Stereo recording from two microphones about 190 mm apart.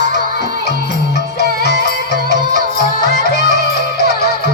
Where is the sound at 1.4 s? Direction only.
55° left (ahead or behind).